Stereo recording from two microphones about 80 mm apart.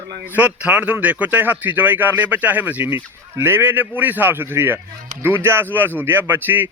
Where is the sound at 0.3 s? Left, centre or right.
Centre.